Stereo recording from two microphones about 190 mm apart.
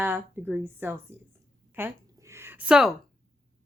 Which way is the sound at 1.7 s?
15° right (ahead or behind).